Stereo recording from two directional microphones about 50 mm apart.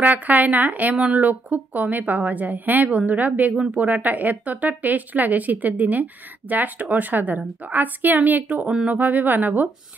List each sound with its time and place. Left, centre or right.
0.0 s a woman's voice: right
8.6 s speech: right
8.9 s a woman's voice: right